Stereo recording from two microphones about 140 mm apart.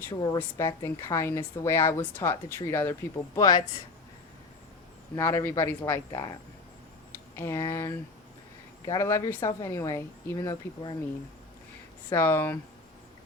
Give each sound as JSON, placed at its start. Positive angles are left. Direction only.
{"t": 0.1, "sound": "speech", "side_deg": 30}
{"t": 3.3, "sound": "speech", "side_deg": 30}
{"t": 5.1, "sound": "speech", "side_deg": 20}
{"t": 7.3, "sound": "speech", "side_deg": 20}
{"t": 12.1, "sound": "speech", "side_deg": 15}